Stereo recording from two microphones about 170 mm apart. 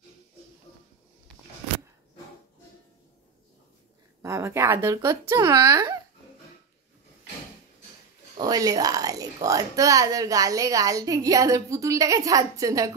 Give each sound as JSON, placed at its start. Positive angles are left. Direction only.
{"t": 4.2, "sound": "speech", "side_deg": -15}
{"t": 8.4, "sound": "speech", "side_deg": -20}